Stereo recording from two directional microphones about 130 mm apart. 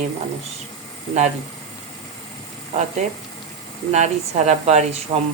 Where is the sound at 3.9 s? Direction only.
60° right (ahead or behind).